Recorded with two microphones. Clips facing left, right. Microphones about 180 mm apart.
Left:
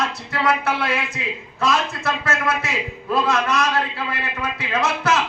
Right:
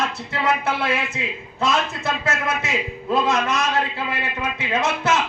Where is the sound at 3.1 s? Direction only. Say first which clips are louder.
Even; 25° right (ahead or behind).